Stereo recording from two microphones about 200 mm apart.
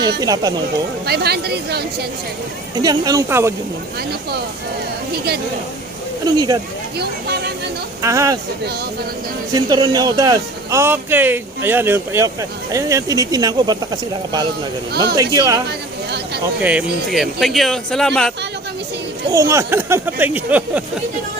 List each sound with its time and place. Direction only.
0.2 s speech: 20° right (ahead or behind)
1.0 s speech: 55° right (ahead or behind)
2.8 s speech: 20° right (ahead or behind)
5.1 s speech: 50° right (ahead or behind)
6.2 s speech: 20° right (ahead or behind)
7.0 s speech: 55° right (ahead or behind)
8.0 s speech: 15° right (ahead or behind)
9.5 s speech: 20° right (ahead or behind)
16.6 s speech: 5° right (ahead or behind)
19.3 s speech: 15° right (ahead or behind)